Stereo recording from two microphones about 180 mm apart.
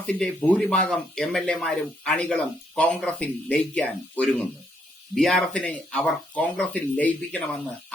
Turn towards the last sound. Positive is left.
turn(degrees=10)  # may be behind; listen again after turning